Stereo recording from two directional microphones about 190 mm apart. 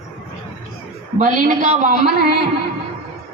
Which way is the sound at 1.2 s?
40° right (ahead or behind).